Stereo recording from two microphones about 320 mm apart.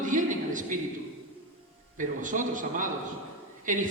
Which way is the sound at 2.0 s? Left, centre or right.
Right.